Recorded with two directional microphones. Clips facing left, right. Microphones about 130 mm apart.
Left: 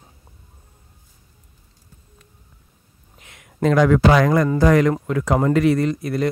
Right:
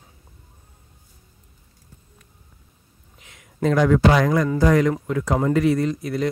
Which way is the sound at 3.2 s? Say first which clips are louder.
Left 2 dB; 60° left (ahead or behind).